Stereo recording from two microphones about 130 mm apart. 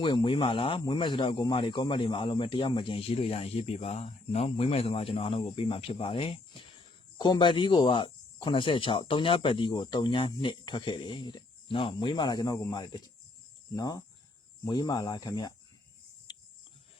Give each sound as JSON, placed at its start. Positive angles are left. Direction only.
{"t": 0.0, "sound": "speech", "side_deg": 40}